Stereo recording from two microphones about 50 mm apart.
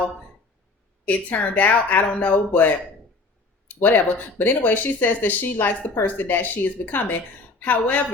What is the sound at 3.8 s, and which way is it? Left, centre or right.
Speech, left.